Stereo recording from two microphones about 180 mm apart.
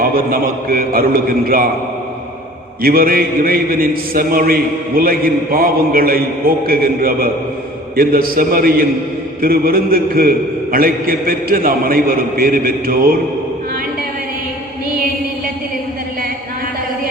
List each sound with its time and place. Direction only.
0.0 s a man's voice: 55° right (ahead or behind)
2.8 s a man's voice: 55° right (ahead or behind)